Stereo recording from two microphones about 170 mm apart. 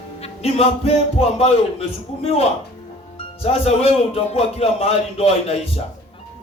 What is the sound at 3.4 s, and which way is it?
A man's voice, 35° left (ahead or behind).